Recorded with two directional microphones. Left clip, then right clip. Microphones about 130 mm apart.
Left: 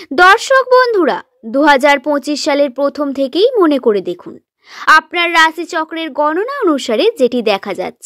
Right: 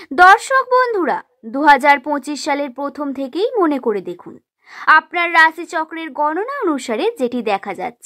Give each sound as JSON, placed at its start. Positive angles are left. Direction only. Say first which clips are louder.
{"t": 0.1, "sound": "speech", "louder": "left 2 dB", "side_deg": 20}